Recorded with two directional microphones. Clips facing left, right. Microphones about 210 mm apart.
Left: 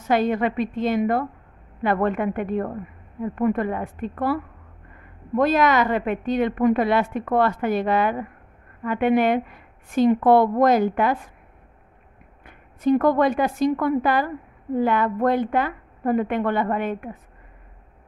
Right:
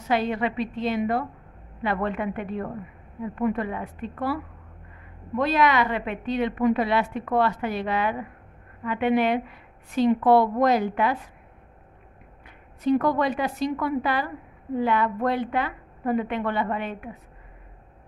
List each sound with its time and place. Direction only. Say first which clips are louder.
0.1 s a woman's voice: left 4 dB; 50° left (ahead or behind)
12.4 s a woman's voice: left 3 dB; 50° left (ahead or behind)